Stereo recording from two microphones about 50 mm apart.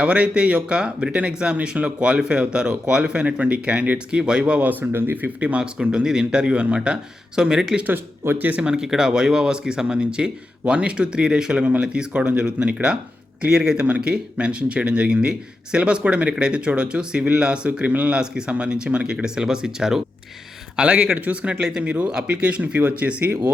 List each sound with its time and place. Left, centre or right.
0.0 s speech: right
4.6 s speech: right
4.9 s speech: right
5.1 s speech: right
8.4 s speech: right
8.7 s speech: centre; by 18.2 s right
18.2 s speech: centre
20.7 s speech: right
21.6 s speech: centre